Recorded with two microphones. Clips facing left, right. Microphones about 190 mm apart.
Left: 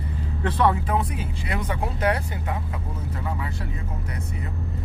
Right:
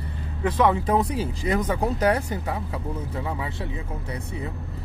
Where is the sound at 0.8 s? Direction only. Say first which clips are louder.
Right 4 dB; 35° right (ahead or behind).